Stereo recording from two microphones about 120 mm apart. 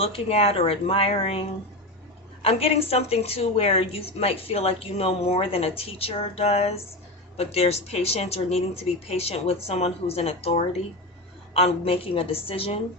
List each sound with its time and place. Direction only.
0.0 s a woman's voice: 55° left (ahead or behind)